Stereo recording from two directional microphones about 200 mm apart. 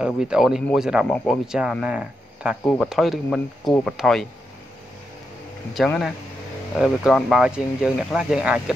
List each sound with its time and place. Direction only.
0.0 s speech: 5° right (ahead or behind)
5.8 s speech: centre (ahead or behind)